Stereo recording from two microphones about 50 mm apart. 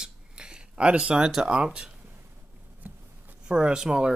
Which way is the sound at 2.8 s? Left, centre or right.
Right.